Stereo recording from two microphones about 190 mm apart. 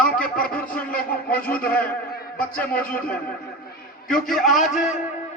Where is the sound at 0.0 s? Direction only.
50° left (ahead or behind).